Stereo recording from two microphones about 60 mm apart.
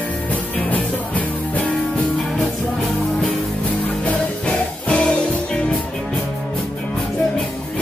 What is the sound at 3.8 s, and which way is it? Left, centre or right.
Music, left.